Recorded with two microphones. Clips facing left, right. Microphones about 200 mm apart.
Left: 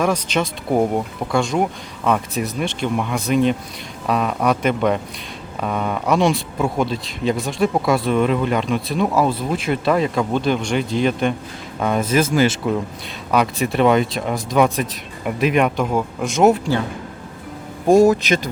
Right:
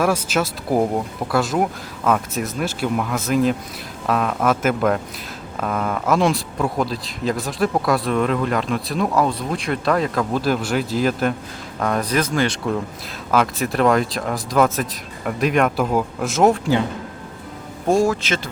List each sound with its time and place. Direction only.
0.0 s speech: 5° right (ahead or behind)
17.8 s a man's voice: 20° left (ahead or behind)